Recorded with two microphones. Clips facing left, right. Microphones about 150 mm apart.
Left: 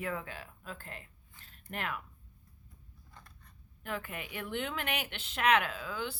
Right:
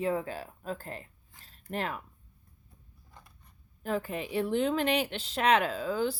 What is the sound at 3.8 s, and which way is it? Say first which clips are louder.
Speech: right 7 dB; 35° right (ahead or behind).